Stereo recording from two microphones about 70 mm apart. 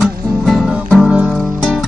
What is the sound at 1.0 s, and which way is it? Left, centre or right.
Guitar, centre.